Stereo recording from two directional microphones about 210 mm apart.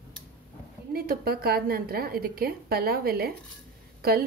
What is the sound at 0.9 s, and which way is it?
A woman's voice, 45° right (ahead or behind).